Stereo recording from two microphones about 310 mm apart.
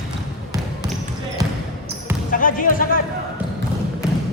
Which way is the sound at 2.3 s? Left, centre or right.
Left.